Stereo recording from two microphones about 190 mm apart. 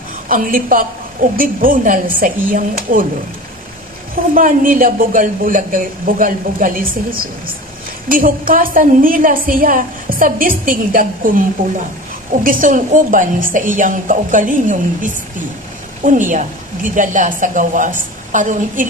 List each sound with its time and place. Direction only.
0.3 s a woman's voice: 45° right (ahead or behind)
4.1 s a woman's voice: 45° right (ahead or behind)
12.4 s a woman's voice: 45° right (ahead or behind)